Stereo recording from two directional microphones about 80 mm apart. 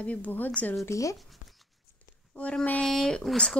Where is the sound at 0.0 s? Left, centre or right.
Centre.